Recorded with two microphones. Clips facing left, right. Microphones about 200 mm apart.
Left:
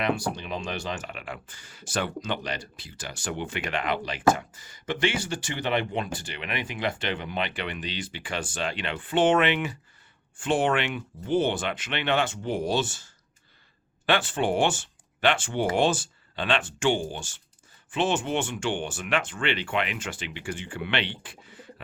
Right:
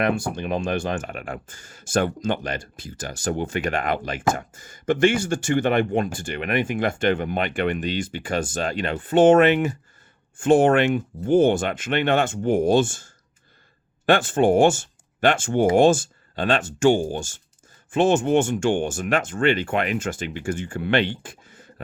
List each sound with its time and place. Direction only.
0.0 s speech: 50° right (ahead or behind)